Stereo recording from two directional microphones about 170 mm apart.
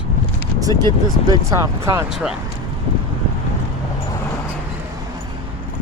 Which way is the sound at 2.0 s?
5° right (ahead or behind).